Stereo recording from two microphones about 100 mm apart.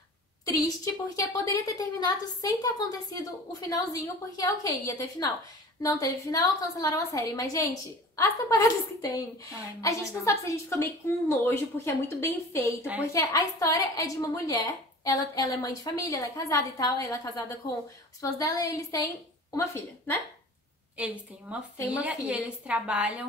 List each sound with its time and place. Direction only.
1.1 s a woman's voice: 35° left (ahead or behind)
21.0 s a woman's voice: 10° right (ahead or behind)